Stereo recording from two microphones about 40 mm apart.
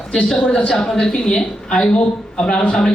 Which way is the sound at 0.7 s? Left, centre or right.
Centre.